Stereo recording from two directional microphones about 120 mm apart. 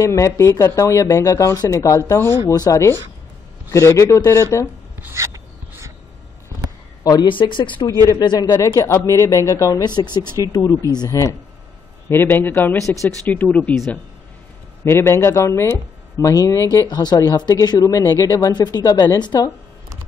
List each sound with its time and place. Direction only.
0.0 s speech: 25° left (ahead or behind)
4.9 s a sound: 20° right (ahead or behind)
7.0 s speech: 35° left (ahead or behind)
8.1 s speech: 30° left (ahead or behind)
12.1 s a man's voice: 15° left (ahead or behind)
13.2 s a man's voice: 10° left (ahead or behind)
14.9 s speech: 20° left (ahead or behind); by 19.5 s 35° left (ahead or behind)